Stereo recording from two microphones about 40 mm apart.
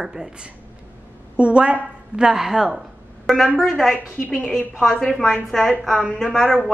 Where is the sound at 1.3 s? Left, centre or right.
Right.